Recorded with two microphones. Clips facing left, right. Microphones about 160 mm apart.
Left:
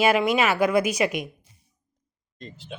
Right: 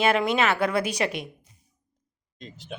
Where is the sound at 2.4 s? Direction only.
Centre (ahead or behind).